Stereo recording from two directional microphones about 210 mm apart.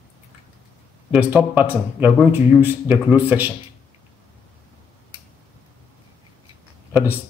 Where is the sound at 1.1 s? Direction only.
10° right (ahead or behind).